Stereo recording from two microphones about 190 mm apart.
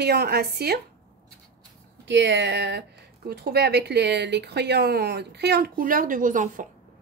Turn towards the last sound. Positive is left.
turn(degrees=-45)  # may be behind; listen again after turning